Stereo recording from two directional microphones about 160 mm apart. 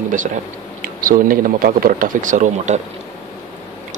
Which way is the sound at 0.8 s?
65° right (ahead or behind).